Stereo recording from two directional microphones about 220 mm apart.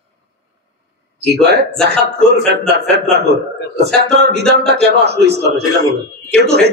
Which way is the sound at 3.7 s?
50° right (ahead or behind).